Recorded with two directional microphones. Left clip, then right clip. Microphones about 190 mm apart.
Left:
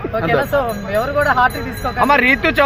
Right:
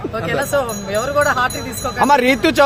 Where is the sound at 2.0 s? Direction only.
70° right (ahead or behind).